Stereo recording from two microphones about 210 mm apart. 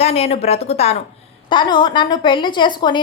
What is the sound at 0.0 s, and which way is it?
A woman's voice, 30° left (ahead or behind).